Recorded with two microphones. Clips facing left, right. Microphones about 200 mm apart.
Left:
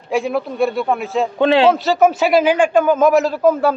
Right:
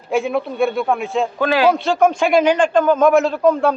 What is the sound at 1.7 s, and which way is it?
A man's voice, 5° left (ahead or behind).